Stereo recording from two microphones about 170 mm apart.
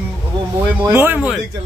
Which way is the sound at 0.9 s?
10° right (ahead or behind).